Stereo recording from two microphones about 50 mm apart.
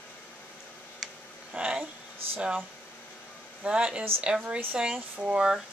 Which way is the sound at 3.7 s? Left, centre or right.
Centre.